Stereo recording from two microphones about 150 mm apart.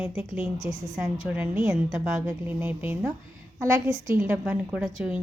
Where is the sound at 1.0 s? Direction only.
10° right (ahead or behind).